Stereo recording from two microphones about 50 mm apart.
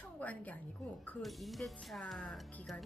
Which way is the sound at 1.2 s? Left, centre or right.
Centre.